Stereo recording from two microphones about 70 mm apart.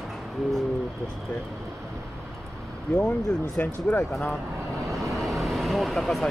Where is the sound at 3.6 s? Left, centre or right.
Left.